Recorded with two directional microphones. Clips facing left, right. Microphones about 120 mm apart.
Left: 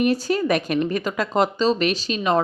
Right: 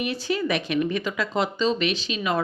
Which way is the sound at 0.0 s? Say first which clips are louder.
Left 6 dB; 40° left (ahead or behind).